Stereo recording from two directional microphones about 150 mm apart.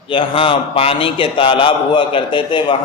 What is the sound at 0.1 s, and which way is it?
A man's voice, 35° left (ahead or behind).